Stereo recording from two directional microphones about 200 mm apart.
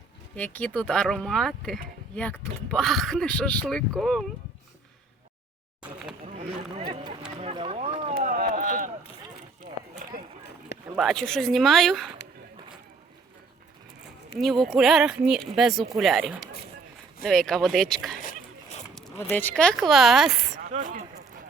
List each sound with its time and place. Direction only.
0.3 s speech: 5° left (ahead or behind)
6.2 s speech: 35° right (ahead or behind)
10.0 s run: 45° right (ahead or behind)
10.9 s speech: centre (ahead or behind)
14.3 s speech: centre (ahead or behind)
20.6 s a sound: 40° right (ahead or behind)